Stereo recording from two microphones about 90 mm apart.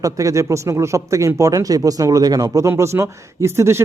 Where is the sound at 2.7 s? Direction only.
30° right (ahead or behind).